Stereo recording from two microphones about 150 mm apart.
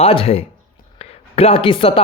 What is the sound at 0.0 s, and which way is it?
A man's voice, 40° left (ahead or behind).